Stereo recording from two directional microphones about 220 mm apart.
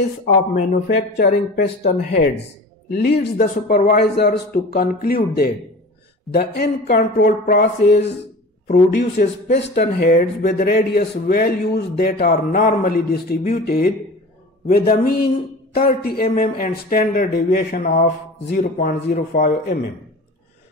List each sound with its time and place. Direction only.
0.7 s speech: 45° left (ahead or behind)
2.9 s speech: 40° left (ahead or behind)